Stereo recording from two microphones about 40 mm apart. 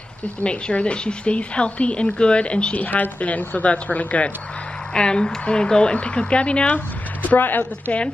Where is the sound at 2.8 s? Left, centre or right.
Left.